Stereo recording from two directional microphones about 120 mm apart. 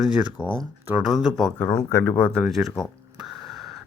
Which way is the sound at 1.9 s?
20° left (ahead or behind).